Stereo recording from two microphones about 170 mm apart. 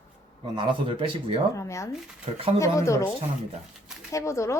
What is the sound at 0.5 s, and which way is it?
Speech, 30° right (ahead or behind).